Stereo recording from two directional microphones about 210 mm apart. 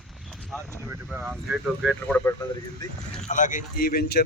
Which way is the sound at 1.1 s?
10° right (ahead or behind).